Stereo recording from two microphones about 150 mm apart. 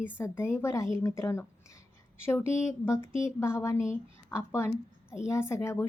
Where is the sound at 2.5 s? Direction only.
15° left (ahead or behind).